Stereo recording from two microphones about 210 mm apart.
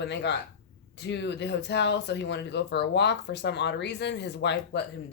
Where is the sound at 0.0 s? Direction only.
55° left (ahead or behind).